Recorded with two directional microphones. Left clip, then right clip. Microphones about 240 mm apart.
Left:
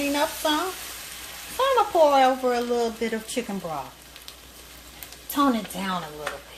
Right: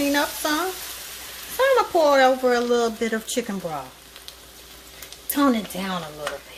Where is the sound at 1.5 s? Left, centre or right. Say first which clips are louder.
Right 2 dB; right.